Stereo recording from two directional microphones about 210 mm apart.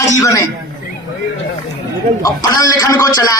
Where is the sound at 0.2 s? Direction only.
15° left (ahead or behind).